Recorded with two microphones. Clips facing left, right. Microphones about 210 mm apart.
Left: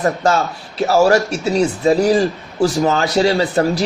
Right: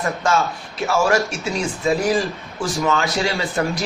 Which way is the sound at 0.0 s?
40° left (ahead or behind).